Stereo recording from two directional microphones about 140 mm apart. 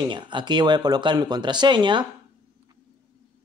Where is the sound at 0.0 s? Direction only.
35° right (ahead or behind).